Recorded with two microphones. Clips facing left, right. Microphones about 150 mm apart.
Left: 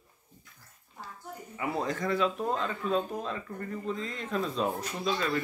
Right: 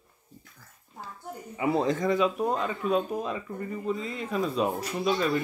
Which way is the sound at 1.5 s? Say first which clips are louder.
Right 6 dB; 25° right (ahead or behind).